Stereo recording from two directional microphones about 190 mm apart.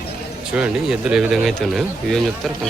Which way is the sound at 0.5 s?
5° right (ahead or behind).